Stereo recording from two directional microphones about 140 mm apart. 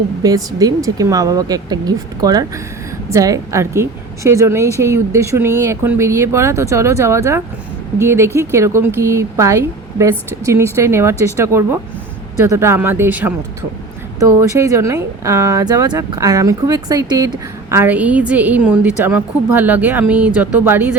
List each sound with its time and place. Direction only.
0.2 s a woman's voice: 25° right (ahead or behind)